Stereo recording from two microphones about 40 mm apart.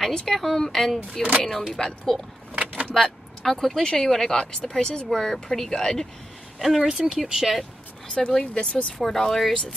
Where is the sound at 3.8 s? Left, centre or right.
Centre.